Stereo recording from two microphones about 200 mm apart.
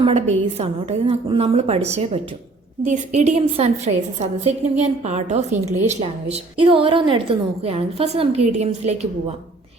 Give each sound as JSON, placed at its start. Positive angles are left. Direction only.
{"t": 0.0, "sound": "a woman's voice", "side_deg": -30}